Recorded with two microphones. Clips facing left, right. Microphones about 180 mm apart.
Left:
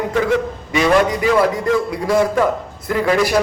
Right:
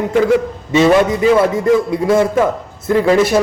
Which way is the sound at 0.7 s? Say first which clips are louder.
Right 4 dB; 25° right (ahead or behind).